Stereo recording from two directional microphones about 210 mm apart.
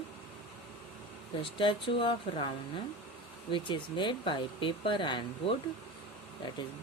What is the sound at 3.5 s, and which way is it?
Speech, 25° left (ahead or behind).